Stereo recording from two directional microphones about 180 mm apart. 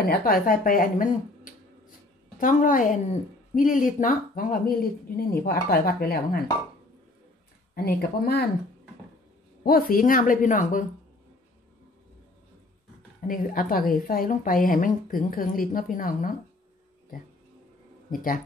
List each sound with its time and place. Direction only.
0.0 s a woman's voice: 55° left (ahead or behind)
7.7 s speech: 60° left (ahead or behind)
9.6 s a woman's voice: 55° left (ahead or behind)
13.3 s a woman's voice: 50° left (ahead or behind)
18.1 s a woman's voice: 50° left (ahead or behind)